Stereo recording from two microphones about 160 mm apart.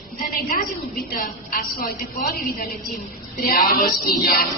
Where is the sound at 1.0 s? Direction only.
60° left (ahead or behind).